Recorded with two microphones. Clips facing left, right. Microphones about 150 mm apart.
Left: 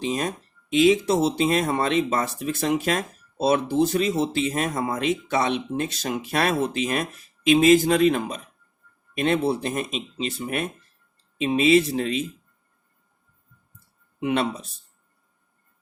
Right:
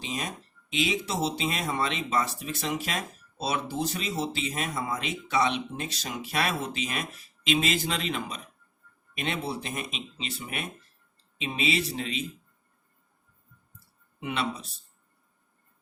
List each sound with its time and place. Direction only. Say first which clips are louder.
0.1 s speech: left 8 dB; 50° left (ahead or behind)
14.2 s speech: left 7 dB; 55° left (ahead or behind)